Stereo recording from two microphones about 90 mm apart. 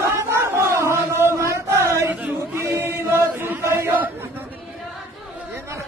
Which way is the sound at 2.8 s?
25° right (ahead or behind).